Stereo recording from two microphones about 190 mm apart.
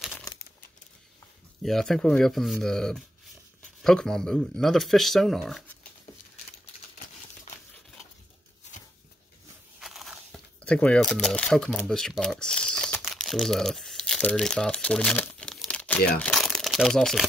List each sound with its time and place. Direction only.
0.1 s crumpling: 20° left (ahead or behind)
1.6 s speech: centre (ahead or behind)
9.8 s speech: centre (ahead or behind)